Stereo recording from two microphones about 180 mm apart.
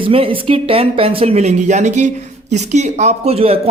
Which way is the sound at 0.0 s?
30° right (ahead or behind).